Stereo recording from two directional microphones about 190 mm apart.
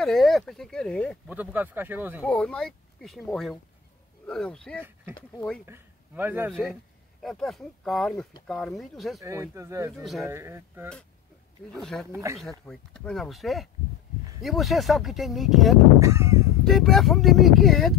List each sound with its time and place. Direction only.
0.0 s speech: centre (ahead or behind)
1.3 s speech: 10° right (ahead or behind)
2.2 s speech: 5° left (ahead or behind)
5.7 s a man's voice: 10° right (ahead or behind)
6.5 s speech: centre (ahead or behind)
9.2 s speech: 15° right (ahead or behind)
11.7 s speech: centre (ahead or behind)
12.1 s speech: 15° right (ahead or behind)
12.4 s speech: centre (ahead or behind)
16.0 s speech: 15° right (ahead or behind)
16.6 s speech: centre (ahead or behind)